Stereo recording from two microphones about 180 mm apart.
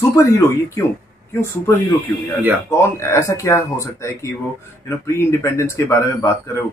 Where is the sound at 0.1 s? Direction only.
15° left (ahead or behind).